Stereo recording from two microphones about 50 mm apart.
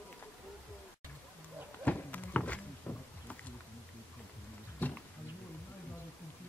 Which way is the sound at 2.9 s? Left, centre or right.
Left.